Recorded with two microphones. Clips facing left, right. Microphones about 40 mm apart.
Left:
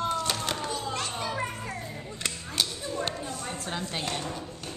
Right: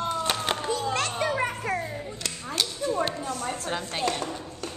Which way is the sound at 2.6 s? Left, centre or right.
Centre.